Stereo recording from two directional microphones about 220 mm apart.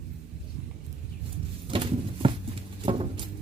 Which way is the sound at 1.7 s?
25° right (ahead or behind).